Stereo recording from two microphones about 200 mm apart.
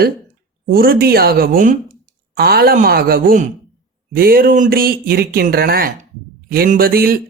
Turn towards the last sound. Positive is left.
turn(degrees=-45)  # may be behind; listen again after turning